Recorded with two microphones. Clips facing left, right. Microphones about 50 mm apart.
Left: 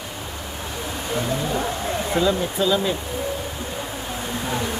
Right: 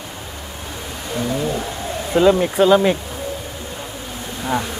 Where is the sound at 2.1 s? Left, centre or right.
Right.